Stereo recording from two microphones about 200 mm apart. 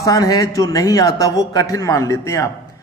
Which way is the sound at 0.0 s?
20° left (ahead or behind).